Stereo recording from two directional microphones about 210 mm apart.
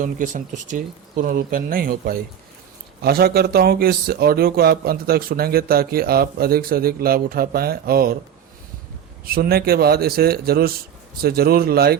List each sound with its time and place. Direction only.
0.0 s speech: 40° right (ahead or behind)
9.2 s speech: 45° right (ahead or behind)